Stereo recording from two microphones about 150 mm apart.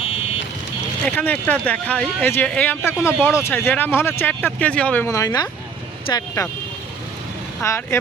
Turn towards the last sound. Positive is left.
turn(degrees=15)  # may be behind; listen again after turning